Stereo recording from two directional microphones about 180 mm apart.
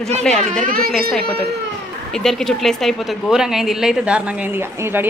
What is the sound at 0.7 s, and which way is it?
Speech, 55° right (ahead or behind).